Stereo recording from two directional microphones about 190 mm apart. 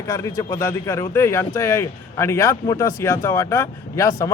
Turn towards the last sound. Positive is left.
turn(degrees=15)  # may be behind; listen again after turning